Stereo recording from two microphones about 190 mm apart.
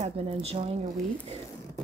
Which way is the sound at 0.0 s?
35° right (ahead or behind).